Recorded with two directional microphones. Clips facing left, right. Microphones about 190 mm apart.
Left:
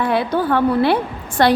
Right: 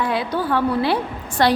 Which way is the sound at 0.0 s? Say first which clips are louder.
Left 4 dB; 55° left (ahead or behind).